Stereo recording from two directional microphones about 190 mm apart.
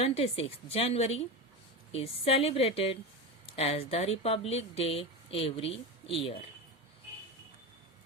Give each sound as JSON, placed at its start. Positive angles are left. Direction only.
{"t": 0.0, "sound": "speech", "side_deg": 30}